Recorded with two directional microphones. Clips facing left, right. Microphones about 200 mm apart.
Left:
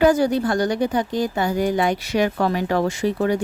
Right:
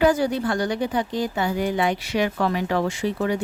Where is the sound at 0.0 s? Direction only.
45° left (ahead or behind).